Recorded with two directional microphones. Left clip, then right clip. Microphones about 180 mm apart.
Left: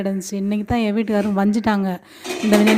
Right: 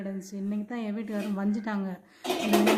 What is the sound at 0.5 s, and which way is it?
Speech, 45° left (ahead or behind).